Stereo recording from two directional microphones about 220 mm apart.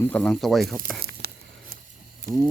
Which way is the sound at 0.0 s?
5° left (ahead or behind).